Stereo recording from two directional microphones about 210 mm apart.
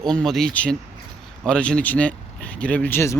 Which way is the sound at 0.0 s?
Centre (ahead or behind).